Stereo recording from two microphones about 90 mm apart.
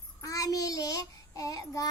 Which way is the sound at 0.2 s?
40° left (ahead or behind).